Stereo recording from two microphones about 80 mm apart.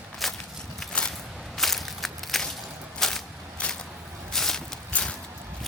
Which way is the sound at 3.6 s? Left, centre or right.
Centre.